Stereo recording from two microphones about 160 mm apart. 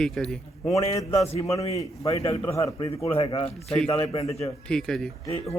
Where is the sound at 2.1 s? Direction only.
35° left (ahead or behind).